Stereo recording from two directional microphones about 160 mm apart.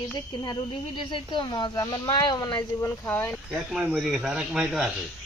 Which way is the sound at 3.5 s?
10° right (ahead or behind).